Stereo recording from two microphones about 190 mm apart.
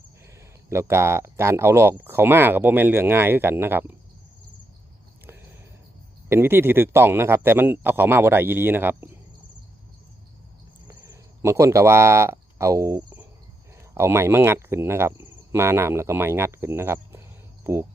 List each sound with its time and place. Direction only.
0.3 s speech: 15° right (ahead or behind)
6.2 s speech: 10° right (ahead or behind)
10.8 s speech: 20° right (ahead or behind)
13.0 s cricket: 5° right (ahead or behind)
13.9 s speech: 15° right (ahead or behind)